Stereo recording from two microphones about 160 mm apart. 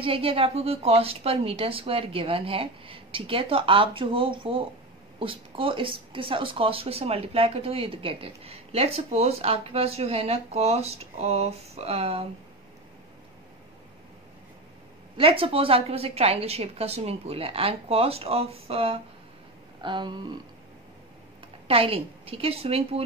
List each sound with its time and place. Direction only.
0.0 s speech: 35° right (ahead or behind)
15.1 s speech: 35° right (ahead or behind)
19.8 s a sound: 30° right (ahead or behind)
21.6 s speech: 35° right (ahead or behind)